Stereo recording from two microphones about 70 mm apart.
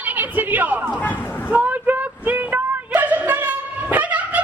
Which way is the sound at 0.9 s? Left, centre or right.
Left.